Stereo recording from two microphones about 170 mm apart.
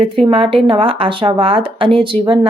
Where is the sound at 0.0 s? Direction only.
30° right (ahead or behind).